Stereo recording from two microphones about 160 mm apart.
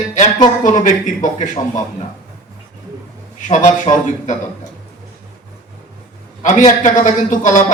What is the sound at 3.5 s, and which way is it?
Speech, 50° left (ahead or behind).